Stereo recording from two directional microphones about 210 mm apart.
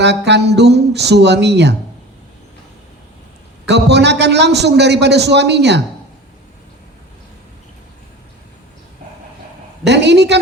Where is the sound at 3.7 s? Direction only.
55° right (ahead or behind).